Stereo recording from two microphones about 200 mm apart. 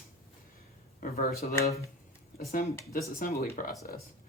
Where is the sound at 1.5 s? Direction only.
15° left (ahead or behind).